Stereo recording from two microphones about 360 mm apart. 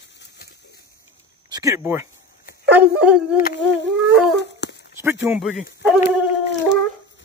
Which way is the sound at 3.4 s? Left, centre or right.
Left.